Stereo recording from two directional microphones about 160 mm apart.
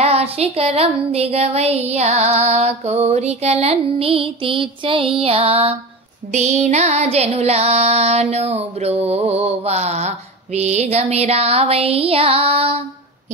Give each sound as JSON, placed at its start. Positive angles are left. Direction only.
{"t": 0.0, "sound": "music", "side_deg": -40}